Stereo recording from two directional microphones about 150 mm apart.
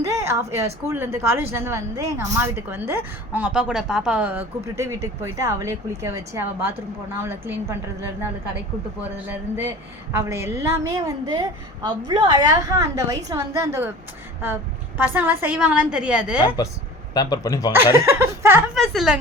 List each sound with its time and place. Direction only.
0.0 s a sound: 20° right (ahead or behind)
0.9 s speech: 15° right (ahead or behind)
10.1 s a woman's voice: 15° right (ahead or behind)
17.2 s speech: 25° left (ahead or behind)
17.9 s speech: 15° right (ahead or behind)
18.7 s a woman's voice: centre (ahead or behind)